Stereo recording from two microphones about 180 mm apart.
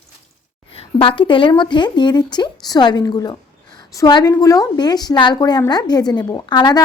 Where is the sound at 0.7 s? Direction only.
30° left (ahead or behind).